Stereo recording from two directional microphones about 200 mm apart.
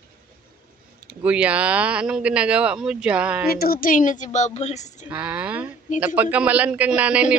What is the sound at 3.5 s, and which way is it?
A woman's voice, 50° left (ahead or behind).